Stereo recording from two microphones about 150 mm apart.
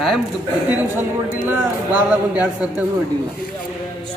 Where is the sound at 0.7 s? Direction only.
15° right (ahead or behind).